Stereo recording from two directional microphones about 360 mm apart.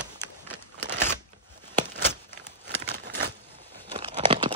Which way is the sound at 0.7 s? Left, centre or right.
Right.